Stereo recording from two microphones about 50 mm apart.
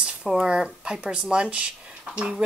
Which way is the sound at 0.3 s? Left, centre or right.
Centre.